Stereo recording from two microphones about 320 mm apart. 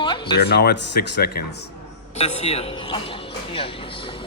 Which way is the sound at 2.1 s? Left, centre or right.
Centre.